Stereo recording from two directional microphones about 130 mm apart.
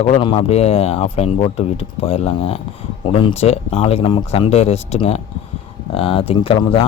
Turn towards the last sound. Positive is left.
turn(degrees=40)  # may be behind; listen again after turning